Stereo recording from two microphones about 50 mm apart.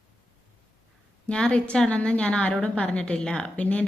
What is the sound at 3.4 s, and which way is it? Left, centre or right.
Speech, left.